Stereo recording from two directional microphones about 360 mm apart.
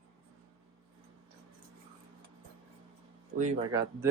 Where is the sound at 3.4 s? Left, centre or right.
Centre.